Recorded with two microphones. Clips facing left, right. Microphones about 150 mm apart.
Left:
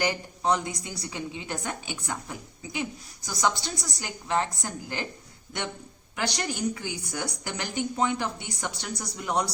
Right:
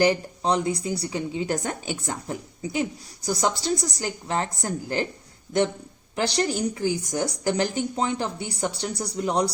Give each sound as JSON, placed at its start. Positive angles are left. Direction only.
{"t": 0.0, "sound": "a woman's voice", "side_deg": -25}
{"t": 6.1, "sound": "a woman's voice", "side_deg": -35}